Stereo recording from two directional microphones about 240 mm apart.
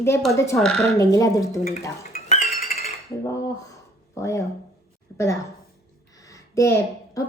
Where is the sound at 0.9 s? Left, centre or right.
Centre.